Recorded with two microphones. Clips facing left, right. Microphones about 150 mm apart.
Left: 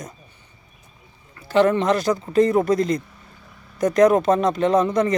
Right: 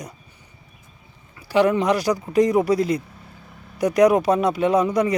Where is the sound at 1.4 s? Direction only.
10° right (ahead or behind).